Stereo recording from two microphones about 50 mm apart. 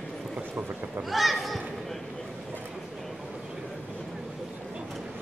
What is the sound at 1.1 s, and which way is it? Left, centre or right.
Speech, centre.